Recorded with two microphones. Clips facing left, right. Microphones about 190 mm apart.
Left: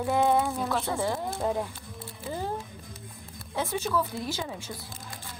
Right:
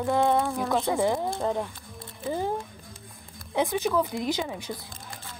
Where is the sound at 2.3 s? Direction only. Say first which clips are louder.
Right 5 dB; 15° right (ahead or behind).